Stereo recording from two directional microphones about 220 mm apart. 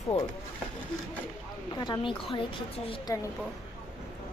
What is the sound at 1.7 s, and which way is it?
A woman's voice, 20° left (ahead or behind).